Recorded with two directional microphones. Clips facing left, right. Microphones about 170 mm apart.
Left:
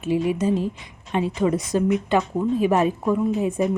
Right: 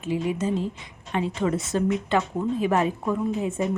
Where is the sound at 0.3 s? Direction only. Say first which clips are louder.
Left 4 dB; 15° left (ahead or behind).